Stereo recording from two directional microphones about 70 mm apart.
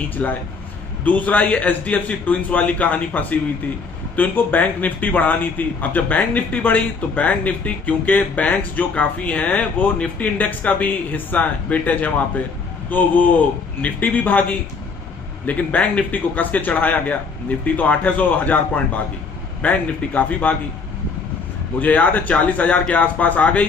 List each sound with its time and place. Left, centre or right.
0.2 s speech: centre
15.4 s speech: left
21.7 s speech: left